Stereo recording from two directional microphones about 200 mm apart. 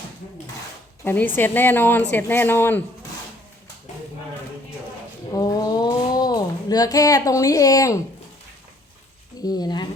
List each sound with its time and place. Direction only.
1.0 s a woman's voice: 10° left (ahead or behind)
5.3 s a sound: 15° left (ahead or behind)
9.4 s speech: 20° left (ahead or behind)